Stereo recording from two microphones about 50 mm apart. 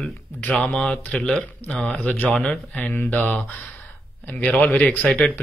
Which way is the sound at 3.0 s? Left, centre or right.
Left.